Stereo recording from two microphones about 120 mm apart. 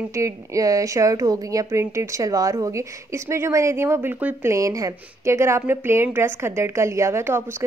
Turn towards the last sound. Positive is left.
turn(degrees=-20)  # may be behind; listen again after turning